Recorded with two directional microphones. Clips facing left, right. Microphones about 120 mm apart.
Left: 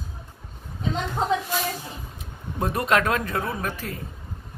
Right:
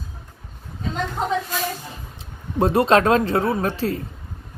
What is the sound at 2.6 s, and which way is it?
A woman's voice, 30° right (ahead or behind).